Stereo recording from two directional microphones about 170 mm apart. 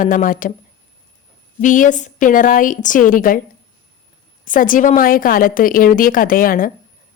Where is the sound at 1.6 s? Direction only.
50° left (ahead or behind).